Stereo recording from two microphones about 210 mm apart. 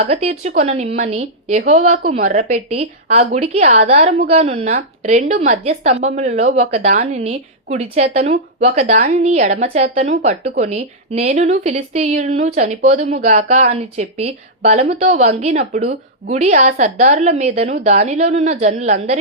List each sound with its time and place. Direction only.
0.0 s a woman's voice: 30° right (ahead or behind)
2.0 s a woman's voice: 45° right (ahead or behind)